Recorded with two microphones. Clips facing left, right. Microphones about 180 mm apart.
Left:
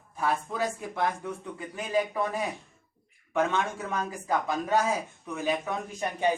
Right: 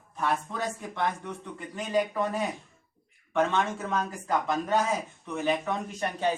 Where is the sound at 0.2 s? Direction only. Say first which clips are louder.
Left 1 dB; 5° left (ahead or behind).